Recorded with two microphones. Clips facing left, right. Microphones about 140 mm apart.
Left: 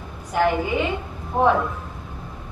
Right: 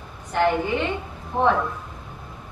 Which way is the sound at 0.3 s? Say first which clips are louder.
Even; 5° left (ahead or behind).